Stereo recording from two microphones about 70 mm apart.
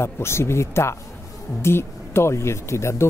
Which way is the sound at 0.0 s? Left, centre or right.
Left.